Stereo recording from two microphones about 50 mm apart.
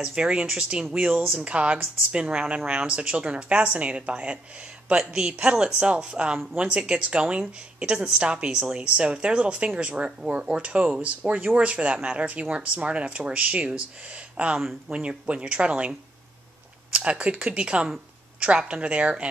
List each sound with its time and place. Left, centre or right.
0.0 s speech: centre